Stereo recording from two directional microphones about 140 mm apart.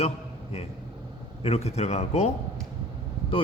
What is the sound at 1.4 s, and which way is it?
Speech, 50° left (ahead or behind).